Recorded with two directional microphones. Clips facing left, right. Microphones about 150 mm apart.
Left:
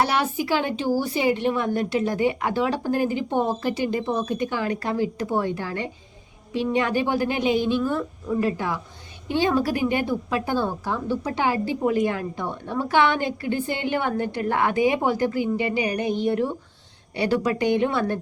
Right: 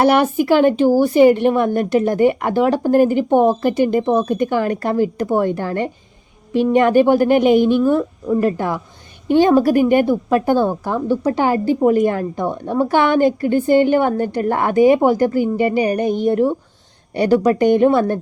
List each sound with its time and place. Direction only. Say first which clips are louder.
0.0 s a woman's voice: right 9 dB; 55° right (ahead or behind)